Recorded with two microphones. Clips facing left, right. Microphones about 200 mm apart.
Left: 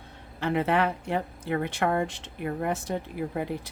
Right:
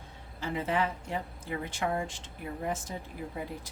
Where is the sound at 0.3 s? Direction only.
65° left (ahead or behind).